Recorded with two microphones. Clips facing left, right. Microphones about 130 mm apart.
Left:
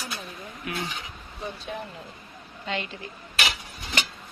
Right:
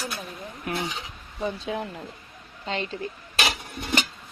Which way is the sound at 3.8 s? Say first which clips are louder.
Right 5 dB; 55° right (ahead or behind).